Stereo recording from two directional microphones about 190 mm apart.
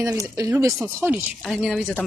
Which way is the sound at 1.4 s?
Centre (ahead or behind).